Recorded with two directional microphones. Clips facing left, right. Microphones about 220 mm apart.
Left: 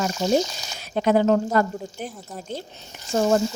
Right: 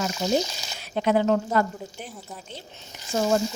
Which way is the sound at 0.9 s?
40° left (ahead or behind).